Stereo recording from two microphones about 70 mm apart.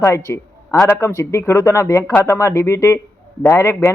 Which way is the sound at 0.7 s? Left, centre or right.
Left.